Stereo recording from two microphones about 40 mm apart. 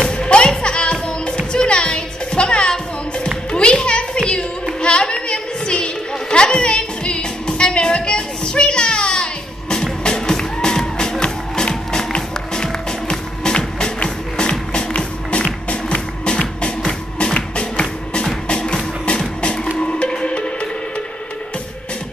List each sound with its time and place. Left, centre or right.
0.1 s music: left
3.5 s children playing: left
4.8 s a sound: left
6.3 s music: left